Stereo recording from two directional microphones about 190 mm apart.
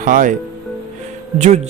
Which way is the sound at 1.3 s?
35° right (ahead or behind).